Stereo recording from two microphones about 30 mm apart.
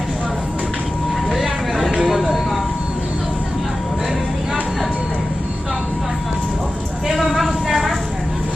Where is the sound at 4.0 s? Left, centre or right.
Centre.